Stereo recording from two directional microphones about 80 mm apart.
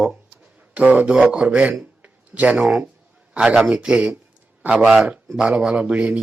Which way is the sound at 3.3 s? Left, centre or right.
Centre.